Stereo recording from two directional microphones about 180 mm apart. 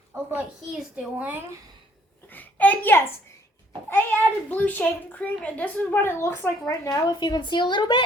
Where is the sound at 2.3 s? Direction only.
10° left (ahead or behind).